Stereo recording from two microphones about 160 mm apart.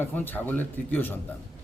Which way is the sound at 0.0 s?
10° left (ahead or behind).